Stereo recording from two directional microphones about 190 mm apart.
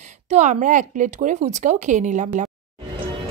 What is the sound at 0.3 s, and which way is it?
A woman's voice, 40° right (ahead or behind).